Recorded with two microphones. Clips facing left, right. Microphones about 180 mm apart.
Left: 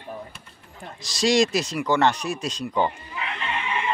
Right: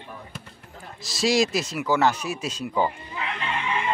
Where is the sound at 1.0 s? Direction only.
5° right (ahead or behind).